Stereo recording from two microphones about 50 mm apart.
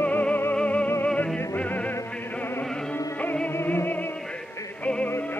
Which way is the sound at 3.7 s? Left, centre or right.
Left.